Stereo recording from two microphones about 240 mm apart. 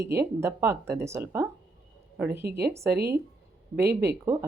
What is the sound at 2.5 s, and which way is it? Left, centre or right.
Speech, right.